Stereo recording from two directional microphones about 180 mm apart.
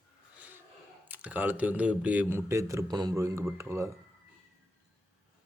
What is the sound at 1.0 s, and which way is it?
Speech, 10° right (ahead or behind).